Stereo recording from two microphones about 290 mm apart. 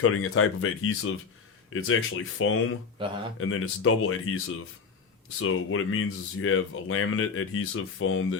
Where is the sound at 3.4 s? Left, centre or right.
Left.